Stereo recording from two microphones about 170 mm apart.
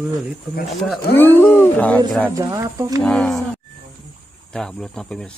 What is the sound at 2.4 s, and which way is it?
Speech, 20° right (ahead or behind).